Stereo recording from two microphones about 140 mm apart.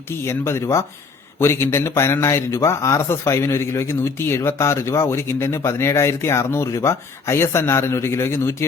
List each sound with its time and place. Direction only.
0.3 s speech: 20° left (ahead or behind)